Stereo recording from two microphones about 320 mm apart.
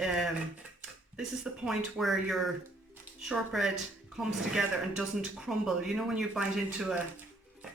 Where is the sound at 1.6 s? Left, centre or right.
Centre.